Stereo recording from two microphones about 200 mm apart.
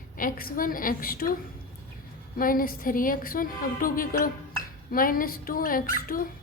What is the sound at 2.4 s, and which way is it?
A child's voice, 45° left (ahead or behind).